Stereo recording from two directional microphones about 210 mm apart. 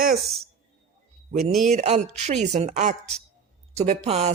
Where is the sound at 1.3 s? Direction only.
35° right (ahead or behind).